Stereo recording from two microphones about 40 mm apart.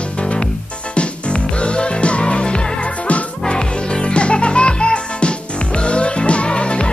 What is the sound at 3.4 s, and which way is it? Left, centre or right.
Music, left.